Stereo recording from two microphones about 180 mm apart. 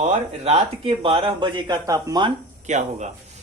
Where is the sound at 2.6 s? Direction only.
40° right (ahead or behind).